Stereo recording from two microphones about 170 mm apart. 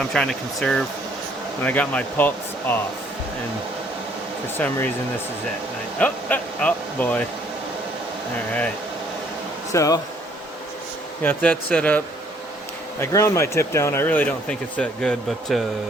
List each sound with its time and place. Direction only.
0.0 s speech: 5° left (ahead or behind)
4.5 s speech: 10° left (ahead or behind)
6.0 s speech: 10° left (ahead or behind)
9.7 s speech: 20° left (ahead or behind)
11.2 s speech: 10° left (ahead or behind)